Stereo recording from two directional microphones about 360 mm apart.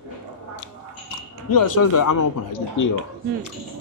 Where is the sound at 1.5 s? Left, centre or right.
Left.